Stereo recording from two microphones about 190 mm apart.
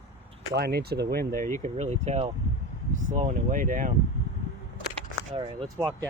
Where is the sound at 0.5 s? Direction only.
55° right (ahead or behind).